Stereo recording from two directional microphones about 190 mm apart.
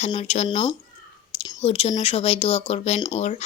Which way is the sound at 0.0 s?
35° left (ahead or behind).